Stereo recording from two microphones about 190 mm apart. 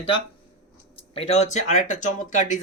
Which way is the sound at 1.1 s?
35° left (ahead or behind).